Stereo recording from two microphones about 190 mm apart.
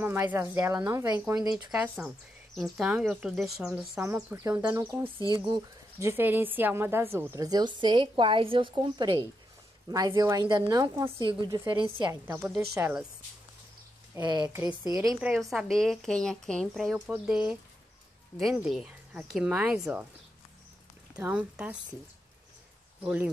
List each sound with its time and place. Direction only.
0.0 s speech: 10° right (ahead or behind)
1.5 s speech: 5° right (ahead or behind)
14.1 s speech: 25° right (ahead or behind)
14.4 s speech: 10° right (ahead or behind)
15.1 s speech: 5° right (ahead or behind)
21.2 s speech: 5° right (ahead or behind)
23.0 s speech: 5° right (ahead or behind)